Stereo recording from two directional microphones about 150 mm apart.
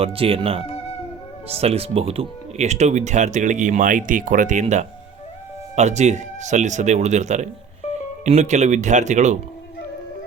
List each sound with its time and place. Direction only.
0.0 s speech: 40° right (ahead or behind)